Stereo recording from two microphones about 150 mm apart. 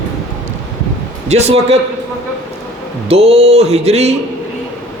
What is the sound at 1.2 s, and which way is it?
Speech, 45° right (ahead or behind).